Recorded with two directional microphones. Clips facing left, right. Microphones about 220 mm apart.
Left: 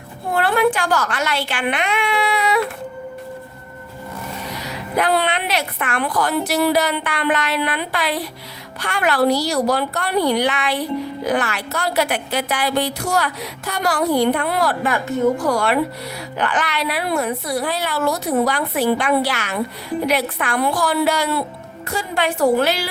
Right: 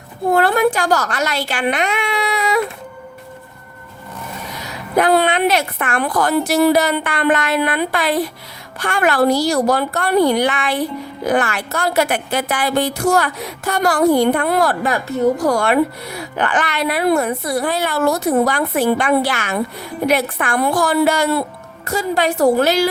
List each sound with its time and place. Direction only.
0.3 s a woman's voice: 40° right (ahead or behind)
4.6 s a woman's voice: 45° right (ahead or behind)